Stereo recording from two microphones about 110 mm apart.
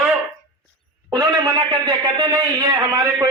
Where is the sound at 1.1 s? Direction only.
40° right (ahead or behind).